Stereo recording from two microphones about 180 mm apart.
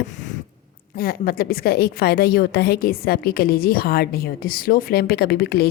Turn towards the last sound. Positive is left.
turn(degrees=65)  # may be behind; listen again after turning